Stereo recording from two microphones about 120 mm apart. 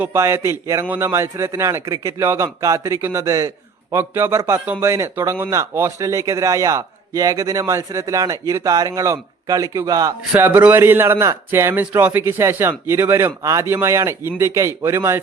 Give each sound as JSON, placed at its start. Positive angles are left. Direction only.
{"t": 0.0, "sound": "speech", "side_deg": -20}
{"t": 10.3, "sound": "speech", "side_deg": -15}